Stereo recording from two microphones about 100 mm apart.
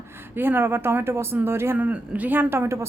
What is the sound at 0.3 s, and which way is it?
A woman's voice, 20° right (ahead or behind).